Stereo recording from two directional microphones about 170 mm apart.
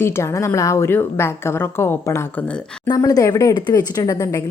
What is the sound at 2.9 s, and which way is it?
Speech, 20° left (ahead or behind).